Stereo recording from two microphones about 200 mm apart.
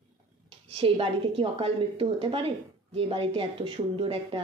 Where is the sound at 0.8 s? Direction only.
25° right (ahead or behind).